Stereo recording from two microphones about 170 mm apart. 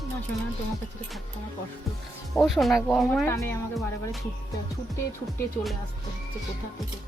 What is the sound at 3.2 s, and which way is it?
Speech, 15° left (ahead or behind).